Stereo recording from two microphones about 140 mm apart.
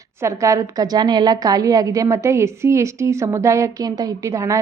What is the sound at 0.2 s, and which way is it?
A woman's voice, 20° right (ahead or behind).